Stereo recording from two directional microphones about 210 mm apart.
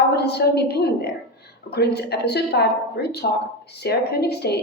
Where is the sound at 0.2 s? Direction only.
50° left (ahead or behind).